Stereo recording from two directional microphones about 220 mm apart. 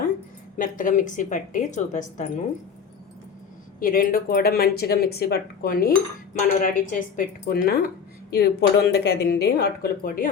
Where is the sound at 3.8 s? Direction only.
40° left (ahead or behind).